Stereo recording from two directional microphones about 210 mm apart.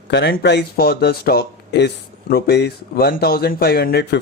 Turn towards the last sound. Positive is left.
turn(degrees=50)  # may be behind; listen again after turning